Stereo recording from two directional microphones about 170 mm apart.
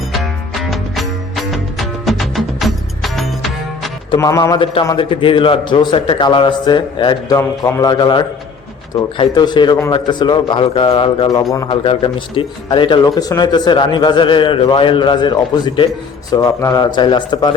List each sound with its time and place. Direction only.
0.2 s music: centre (ahead or behind)
4.2 s speech: 20° left (ahead or behind)
11.8 s speech: 30° left (ahead or behind)